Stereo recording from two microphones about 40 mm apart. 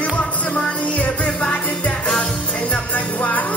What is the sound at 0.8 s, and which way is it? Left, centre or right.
Music, left.